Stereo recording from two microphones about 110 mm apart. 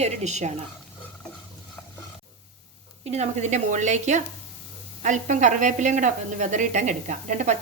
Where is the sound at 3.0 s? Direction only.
80° right.